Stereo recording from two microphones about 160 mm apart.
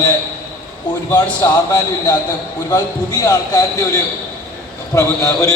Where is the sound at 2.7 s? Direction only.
20° left (ahead or behind).